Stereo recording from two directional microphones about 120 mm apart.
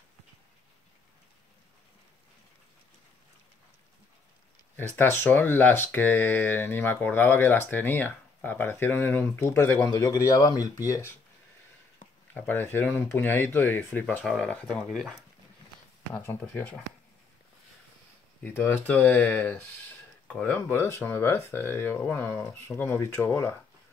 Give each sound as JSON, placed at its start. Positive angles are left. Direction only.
{"t": 4.7, "sound": "speech", "side_deg": 15}
{"t": 12.4, "sound": "speech", "side_deg": 15}
{"t": 18.4, "sound": "speech", "side_deg": 15}